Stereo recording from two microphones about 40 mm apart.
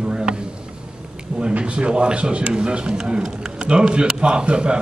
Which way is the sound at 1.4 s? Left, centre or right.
Right.